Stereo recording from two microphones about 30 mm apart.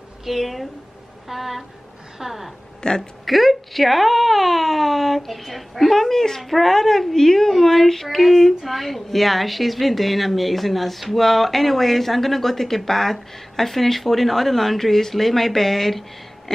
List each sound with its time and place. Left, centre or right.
0.2 s a woman's voice: centre
2.1 s a sound: centre
2.8 s speech: left
3.3 s a woman's voice: centre